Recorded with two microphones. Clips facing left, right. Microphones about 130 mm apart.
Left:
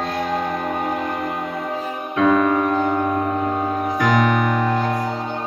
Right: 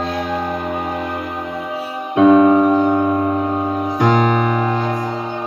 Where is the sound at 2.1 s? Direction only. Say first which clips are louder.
Right 7 dB; 25° right (ahead or behind).